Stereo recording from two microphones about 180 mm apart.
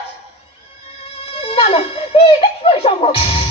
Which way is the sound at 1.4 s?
30° left (ahead or behind).